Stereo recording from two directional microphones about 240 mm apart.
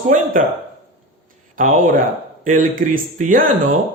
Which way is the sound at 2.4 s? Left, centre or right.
Right.